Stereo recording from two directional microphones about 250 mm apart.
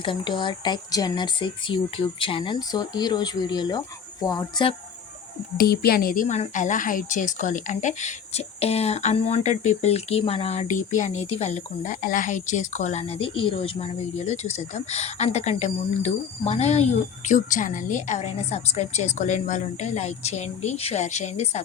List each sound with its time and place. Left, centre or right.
0.0 s speech: centre
5.5 s speech: left